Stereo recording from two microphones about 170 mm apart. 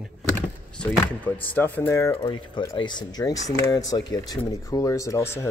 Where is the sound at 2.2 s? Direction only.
25° left (ahead or behind).